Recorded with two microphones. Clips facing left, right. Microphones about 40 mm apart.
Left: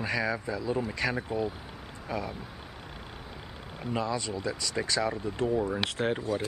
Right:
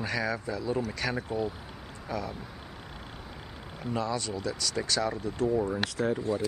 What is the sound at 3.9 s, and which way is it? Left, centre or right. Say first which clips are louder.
Speech: even; left.